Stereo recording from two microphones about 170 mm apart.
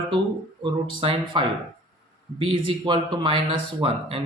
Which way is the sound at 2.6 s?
30° right (ahead or behind).